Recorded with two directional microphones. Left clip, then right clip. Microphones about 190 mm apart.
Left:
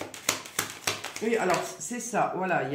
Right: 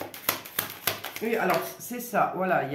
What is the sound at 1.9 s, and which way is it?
Speech, 20° right (ahead or behind).